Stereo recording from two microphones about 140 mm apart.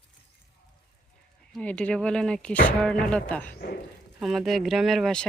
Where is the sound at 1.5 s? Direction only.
10° left (ahead or behind).